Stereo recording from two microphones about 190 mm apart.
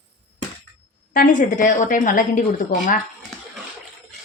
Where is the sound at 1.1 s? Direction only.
45° left (ahead or behind).